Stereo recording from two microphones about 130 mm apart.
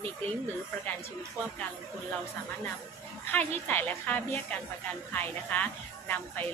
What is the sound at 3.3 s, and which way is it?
Speech, 15° left (ahead or behind).